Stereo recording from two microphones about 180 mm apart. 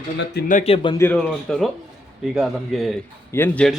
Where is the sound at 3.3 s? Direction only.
10° left (ahead or behind).